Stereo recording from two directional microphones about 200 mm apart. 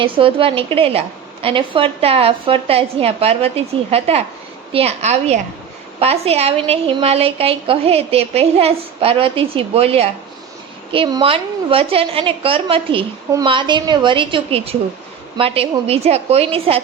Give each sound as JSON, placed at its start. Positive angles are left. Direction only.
{"t": 0.0, "sound": "a woman's voice", "side_deg": -25}